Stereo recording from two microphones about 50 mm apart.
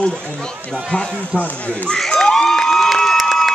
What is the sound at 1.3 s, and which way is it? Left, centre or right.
Speech, left.